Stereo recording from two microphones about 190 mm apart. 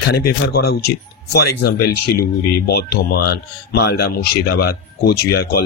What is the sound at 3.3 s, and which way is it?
Speech, 60° left (ahead or behind).